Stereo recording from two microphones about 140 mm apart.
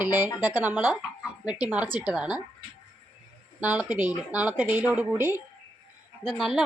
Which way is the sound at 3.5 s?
10° right (ahead or behind).